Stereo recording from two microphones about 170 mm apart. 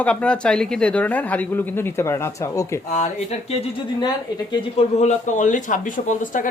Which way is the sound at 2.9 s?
45° left (ahead or behind).